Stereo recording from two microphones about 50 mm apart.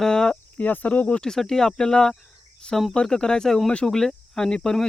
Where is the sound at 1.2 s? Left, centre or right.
Centre.